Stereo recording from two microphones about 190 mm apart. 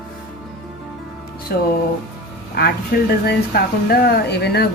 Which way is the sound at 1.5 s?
50° left (ahead or behind).